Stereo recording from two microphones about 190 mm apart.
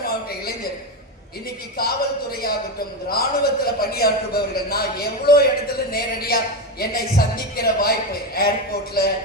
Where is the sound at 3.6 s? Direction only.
55° left (ahead or behind).